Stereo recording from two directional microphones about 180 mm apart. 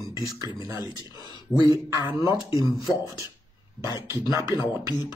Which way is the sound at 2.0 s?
25° left (ahead or behind).